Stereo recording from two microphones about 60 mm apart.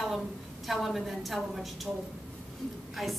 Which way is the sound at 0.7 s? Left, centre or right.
Centre.